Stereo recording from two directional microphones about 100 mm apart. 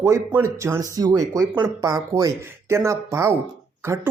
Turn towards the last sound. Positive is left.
turn(degrees=-25)  # may be behind; listen again after turning